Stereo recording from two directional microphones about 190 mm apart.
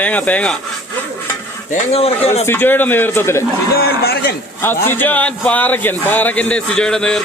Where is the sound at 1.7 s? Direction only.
30° left (ahead or behind).